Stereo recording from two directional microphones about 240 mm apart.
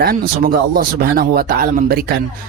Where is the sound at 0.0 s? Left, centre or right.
Right.